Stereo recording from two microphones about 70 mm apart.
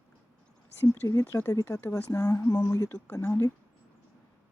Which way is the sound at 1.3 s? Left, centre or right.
Left.